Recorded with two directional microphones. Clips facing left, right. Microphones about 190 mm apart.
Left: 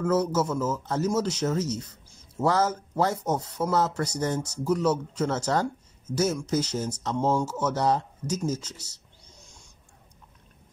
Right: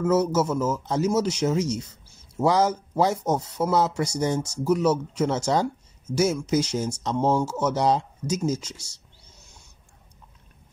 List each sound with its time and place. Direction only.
0.0 s speech: 10° right (ahead or behind)
9.4 s owl: 5° right (ahead or behind)